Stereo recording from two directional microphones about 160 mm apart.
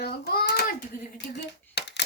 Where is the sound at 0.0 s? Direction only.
80° left.